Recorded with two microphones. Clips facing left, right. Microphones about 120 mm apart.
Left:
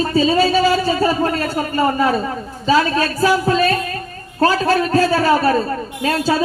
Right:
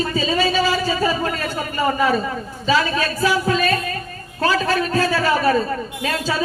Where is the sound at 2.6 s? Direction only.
35° left (ahead or behind).